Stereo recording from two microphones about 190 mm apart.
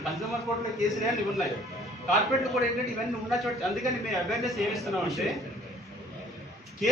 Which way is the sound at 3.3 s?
Centre (ahead or behind).